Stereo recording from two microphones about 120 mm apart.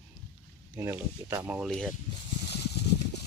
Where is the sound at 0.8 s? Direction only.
20° right (ahead or behind).